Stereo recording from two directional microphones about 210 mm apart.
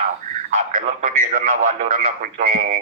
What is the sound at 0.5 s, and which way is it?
Radio, 35° right (ahead or behind).